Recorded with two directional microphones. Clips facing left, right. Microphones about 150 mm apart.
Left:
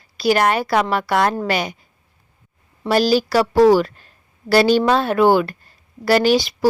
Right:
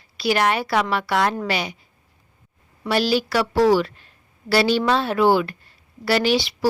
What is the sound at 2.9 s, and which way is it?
A woman's voice, 40° left (ahead or behind).